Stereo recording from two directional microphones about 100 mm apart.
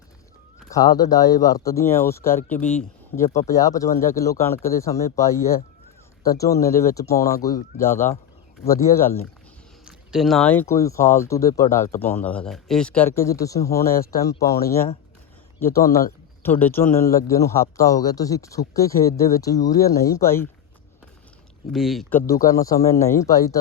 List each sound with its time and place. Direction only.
0.7 s speech: 40° left (ahead or behind); by 2.8 s 15° left (ahead or behind)
3.3 s speech: 35° left (ahead or behind)
7.9 s speech: 25° left (ahead or behind)
9.8 s a sound: 5° right (ahead or behind)
10.4 s speech: 15° left (ahead or behind)
10.7 s speech: 30° left (ahead or behind); by 13.1 s 10° left (ahead or behind)
13.1 s speech: 30° left (ahead or behind)
16.4 s speech: 20° left (ahead or behind)
21.7 s speech: centre (ahead or behind)
22.3 s speech: 35° left (ahead or behind)